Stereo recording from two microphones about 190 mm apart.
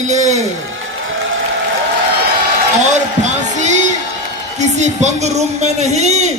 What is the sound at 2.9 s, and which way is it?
Speech, 40° right (ahead or behind).